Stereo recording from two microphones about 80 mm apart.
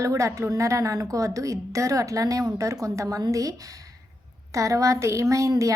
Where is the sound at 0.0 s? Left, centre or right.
Right.